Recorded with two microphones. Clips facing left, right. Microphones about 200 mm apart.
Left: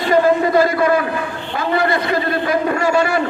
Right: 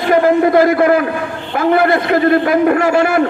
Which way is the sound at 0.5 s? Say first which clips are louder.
Right 4 dB; 55° right (ahead or behind).